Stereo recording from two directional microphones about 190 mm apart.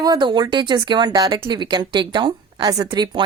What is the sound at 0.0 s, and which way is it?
Speech, 20° right (ahead or behind).